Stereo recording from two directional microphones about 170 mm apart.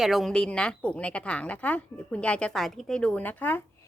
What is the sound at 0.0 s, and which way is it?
A woman's voice, centre (ahead or behind).